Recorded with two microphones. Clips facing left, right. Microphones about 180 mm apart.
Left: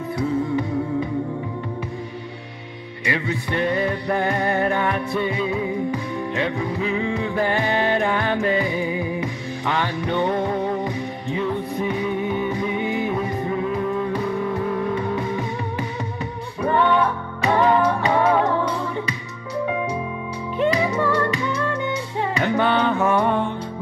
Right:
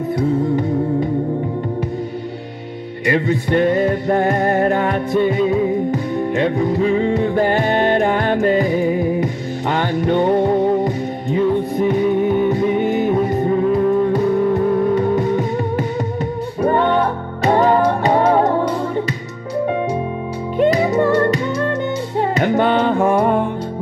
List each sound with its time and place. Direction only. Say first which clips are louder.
3.1 s music: right 8 dB; 45° right (ahead or behind)
16.6 s music: right 3 dB; 40° right (ahead or behind)
20.5 s music: right 6 dB; 40° right (ahead or behind)